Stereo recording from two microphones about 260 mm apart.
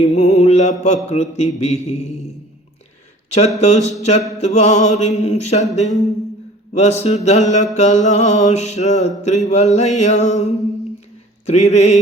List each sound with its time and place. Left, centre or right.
0.1 s mantra: left
3.2 s speech: left
3.6 s mantra: left